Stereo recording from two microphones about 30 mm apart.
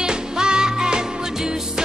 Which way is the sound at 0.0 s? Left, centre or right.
Right.